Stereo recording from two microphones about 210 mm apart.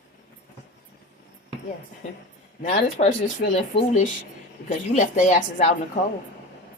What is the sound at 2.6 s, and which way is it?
Speech, 40° left (ahead or behind).